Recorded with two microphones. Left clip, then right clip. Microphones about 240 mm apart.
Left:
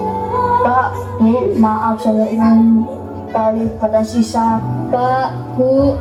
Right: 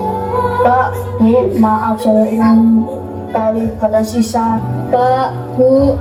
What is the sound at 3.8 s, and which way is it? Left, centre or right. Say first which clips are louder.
Child singing: right 1 dB; right.